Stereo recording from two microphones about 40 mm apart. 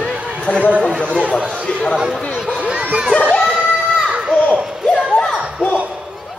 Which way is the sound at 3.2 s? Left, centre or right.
Left.